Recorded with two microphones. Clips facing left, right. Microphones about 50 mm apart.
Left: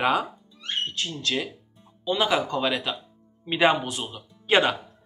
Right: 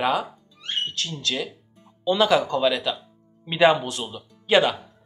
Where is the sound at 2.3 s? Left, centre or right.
Left.